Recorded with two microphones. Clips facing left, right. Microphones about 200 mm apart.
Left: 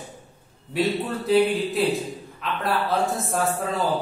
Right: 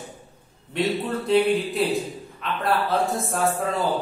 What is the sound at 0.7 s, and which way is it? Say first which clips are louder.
A man's voice: even; centre (ahead or behind).